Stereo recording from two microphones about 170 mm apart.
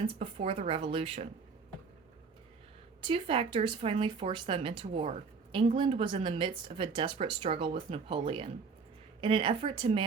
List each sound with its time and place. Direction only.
0.0 s speech: 35° right (ahead or behind)
3.0 s speech: 30° right (ahead or behind)